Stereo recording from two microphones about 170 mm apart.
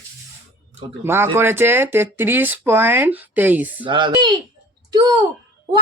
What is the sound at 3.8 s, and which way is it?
A child's voice, 25° right (ahead or behind).